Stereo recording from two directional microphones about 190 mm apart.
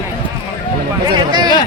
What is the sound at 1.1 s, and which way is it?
Speech, 25° right (ahead or behind).